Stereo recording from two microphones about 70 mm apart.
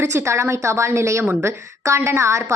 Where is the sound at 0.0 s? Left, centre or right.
Right.